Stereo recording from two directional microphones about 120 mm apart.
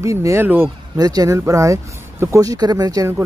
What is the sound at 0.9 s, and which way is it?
Speech, 30° right (ahead or behind).